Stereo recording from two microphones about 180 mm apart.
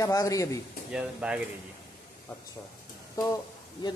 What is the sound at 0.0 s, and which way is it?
Speech, 20° left (ahead or behind).